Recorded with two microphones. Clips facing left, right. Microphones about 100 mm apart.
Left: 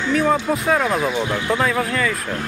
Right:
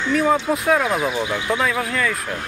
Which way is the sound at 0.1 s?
Centre (ahead or behind).